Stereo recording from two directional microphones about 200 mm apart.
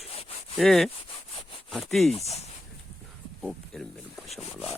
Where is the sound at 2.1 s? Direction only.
30° left (ahead or behind).